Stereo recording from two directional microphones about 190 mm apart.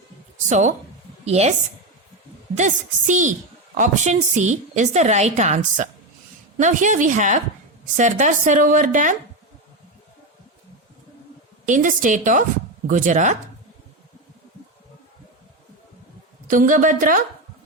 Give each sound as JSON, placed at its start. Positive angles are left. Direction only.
{"t": 0.4, "sound": "a woman's voice", "side_deg": -40}
{"t": 2.6, "sound": "a woman's voice", "side_deg": -40}
{"t": 11.6, "sound": "a woman's voice", "side_deg": -40}
{"t": 16.5, "sound": "a woman's voice", "side_deg": -45}